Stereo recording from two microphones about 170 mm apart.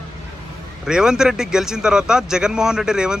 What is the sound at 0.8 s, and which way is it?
Speech, 5° right (ahead or behind).